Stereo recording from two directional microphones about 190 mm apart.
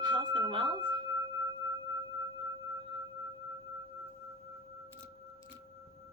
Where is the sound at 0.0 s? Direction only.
25° right (ahead or behind).